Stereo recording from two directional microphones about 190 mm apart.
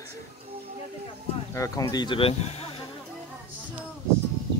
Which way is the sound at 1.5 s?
15° left (ahead or behind).